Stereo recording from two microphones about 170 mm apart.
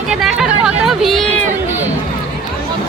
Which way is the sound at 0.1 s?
5° right (ahead or behind).